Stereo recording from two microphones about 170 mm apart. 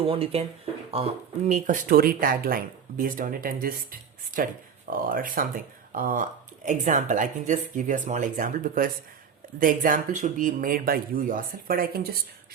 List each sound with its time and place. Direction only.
0.0 s speech: 35° right (ahead or behind); by 12.2 s 60° right (ahead or behind)